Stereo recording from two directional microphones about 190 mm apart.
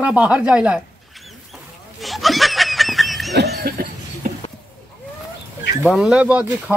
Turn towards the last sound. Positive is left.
turn(degrees=-5)  # may be behind; listen again after turning